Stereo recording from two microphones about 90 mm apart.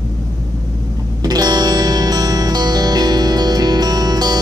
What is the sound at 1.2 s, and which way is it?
Music, 45° right (ahead or behind).